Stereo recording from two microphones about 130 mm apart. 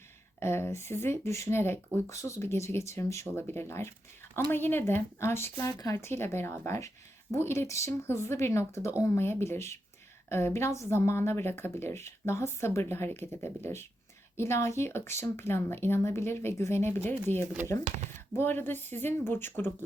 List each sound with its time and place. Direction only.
0.3 s speech: 20° left (ahead or behind)